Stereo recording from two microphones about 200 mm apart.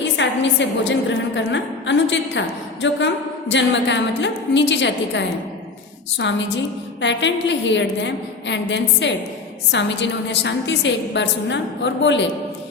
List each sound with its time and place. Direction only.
0.0 s a sound: 65° left (ahead or behind)
1.4 s a woman's voice: 65° left (ahead or behind)
6.2 s a woman's voice: 65° left (ahead or behind)